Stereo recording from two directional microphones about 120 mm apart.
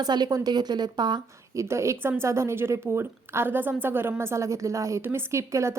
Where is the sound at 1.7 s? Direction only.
25° right (ahead or behind).